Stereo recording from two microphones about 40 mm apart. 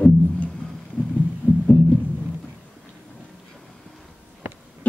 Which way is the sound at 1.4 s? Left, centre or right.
Left.